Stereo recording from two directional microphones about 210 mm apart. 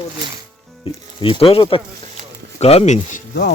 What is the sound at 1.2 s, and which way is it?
Speech, 25° left (ahead or behind).